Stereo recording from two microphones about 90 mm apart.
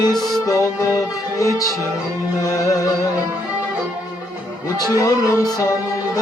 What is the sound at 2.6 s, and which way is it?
Speech, 40° left (ahead or behind).